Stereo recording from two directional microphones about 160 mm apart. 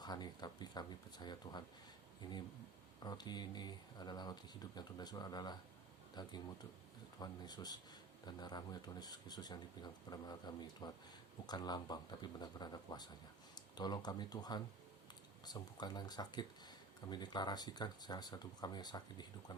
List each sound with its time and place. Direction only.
0.0 s speech: 25° left (ahead or behind)
3.0 s speech: 25° left (ahead or behind)